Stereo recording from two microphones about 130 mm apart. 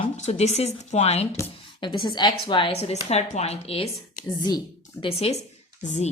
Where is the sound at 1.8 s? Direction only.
40° left (ahead or behind).